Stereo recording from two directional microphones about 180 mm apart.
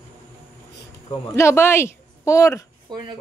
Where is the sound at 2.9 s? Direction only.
25° right (ahead or behind).